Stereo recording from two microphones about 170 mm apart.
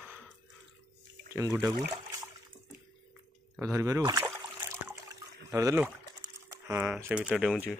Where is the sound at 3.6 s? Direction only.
20° right (ahead or behind).